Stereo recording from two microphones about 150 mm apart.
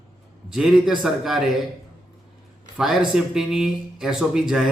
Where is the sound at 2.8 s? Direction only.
5° right (ahead or behind).